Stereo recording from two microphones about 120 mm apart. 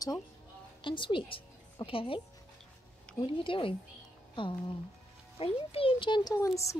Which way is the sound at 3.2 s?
45° left (ahead or behind).